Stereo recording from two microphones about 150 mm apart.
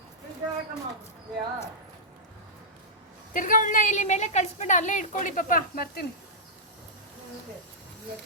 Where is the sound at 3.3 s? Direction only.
60° left (ahead or behind); by 6.0 s 80° left.